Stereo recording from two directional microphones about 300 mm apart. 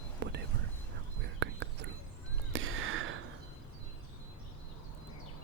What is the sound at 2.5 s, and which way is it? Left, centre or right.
Crow, right.